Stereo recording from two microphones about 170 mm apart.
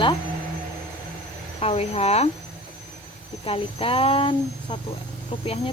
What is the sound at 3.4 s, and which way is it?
Speech, 35° left (ahead or behind).